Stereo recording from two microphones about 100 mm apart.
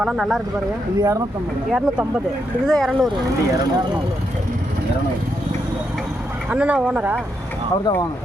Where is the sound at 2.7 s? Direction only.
5° left (ahead or behind).